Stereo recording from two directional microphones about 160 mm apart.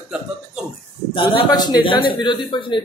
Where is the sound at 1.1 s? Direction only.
30° left (ahead or behind).